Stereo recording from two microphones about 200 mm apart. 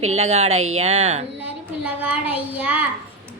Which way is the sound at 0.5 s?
90° right.